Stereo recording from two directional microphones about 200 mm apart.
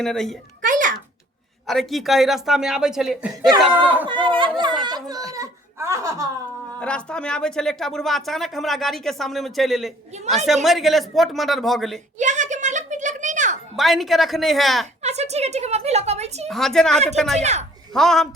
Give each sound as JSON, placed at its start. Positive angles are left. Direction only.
{"t": 0.0, "sound": "speech", "side_deg": 0}
{"t": 0.6, "sound": "a sound", "side_deg": -40}
{"t": 1.6, "sound": "speech", "side_deg": 0}
{"t": 4.1, "sound": "a child's voice", "side_deg": -25}
{"t": 6.7, "sound": "speech", "side_deg": 5}
{"t": 12.2, "sound": "a sound", "side_deg": -35}
{"t": 13.7, "sound": "speech", "side_deg": 0}
{"t": 15.0, "sound": "a woman's voice", "side_deg": -35}
{"t": 16.5, "sound": "speech", "side_deg": 0}
{"t": 17.4, "sound": "a woman's voice", "side_deg": -35}
{"t": 17.9, "sound": "speech", "side_deg": 0}